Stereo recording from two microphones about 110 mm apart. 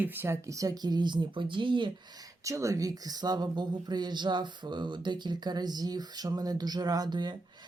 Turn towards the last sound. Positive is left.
turn(degrees=-40)  # may be behind; listen again after turning